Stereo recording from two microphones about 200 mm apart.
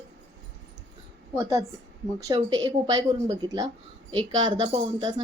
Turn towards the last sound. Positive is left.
turn(degrees=-20)  # may be behind; listen again after turning